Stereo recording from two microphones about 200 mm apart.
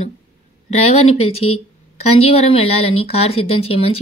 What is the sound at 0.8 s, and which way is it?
Speech, 30° left (ahead or behind).